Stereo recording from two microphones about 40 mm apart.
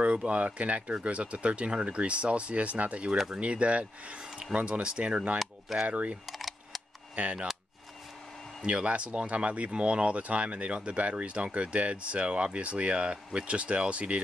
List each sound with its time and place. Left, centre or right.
0.0 s speech: right
6.2 s camera: centre
8.6 s speech: right